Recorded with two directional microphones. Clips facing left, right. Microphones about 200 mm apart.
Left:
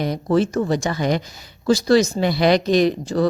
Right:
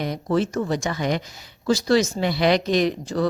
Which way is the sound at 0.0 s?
35° left (ahead or behind).